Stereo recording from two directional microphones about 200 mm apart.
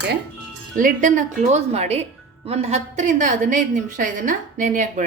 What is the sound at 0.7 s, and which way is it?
A woman's voice, 40° right (ahead or behind).